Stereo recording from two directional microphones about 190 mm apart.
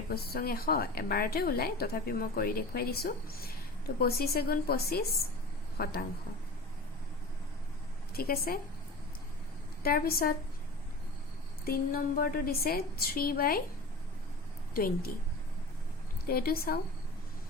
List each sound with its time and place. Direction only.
0.1 s a woman's voice: 55° left (ahead or behind)
8.1 s a woman's voice: 50° left (ahead or behind)
9.8 s a woman's voice: 50° left (ahead or behind)
11.6 s a woman's voice: 50° left (ahead or behind)
14.7 s a woman's voice: 50° left (ahead or behind)
16.2 s a woman's voice: 50° left (ahead or behind)